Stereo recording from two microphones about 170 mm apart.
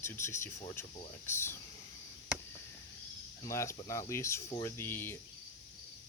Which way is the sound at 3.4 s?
15° left (ahead or behind).